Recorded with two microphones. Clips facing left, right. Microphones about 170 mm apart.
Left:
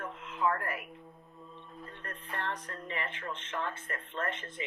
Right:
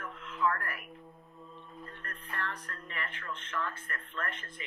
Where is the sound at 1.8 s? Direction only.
20° left (ahead or behind).